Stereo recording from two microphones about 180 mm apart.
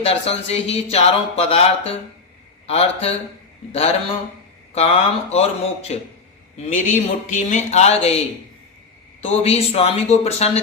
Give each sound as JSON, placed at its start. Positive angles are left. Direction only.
{"t": 0.0, "sound": "speech", "side_deg": 35}
{"t": 6.7, "sound": "speech", "side_deg": 45}
{"t": 9.2, "sound": "speech", "side_deg": 35}